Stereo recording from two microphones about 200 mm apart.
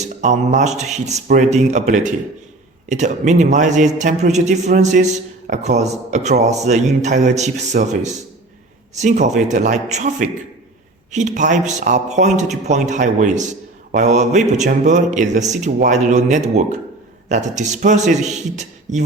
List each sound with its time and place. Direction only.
0.0 s a man's voice: 35° right (ahead or behind)